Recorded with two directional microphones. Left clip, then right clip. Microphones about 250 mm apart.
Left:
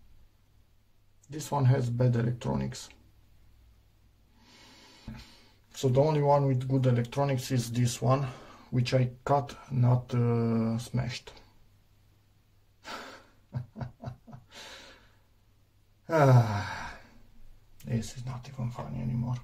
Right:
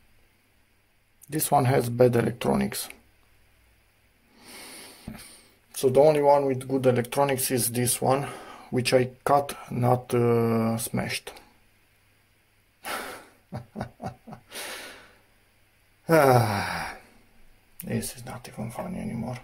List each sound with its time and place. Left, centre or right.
1.3 s speech: right
5.1 s a sound: right
5.7 s speech: right
12.8 s a sound: right
16.1 s gasp: right
17.7 s speech: right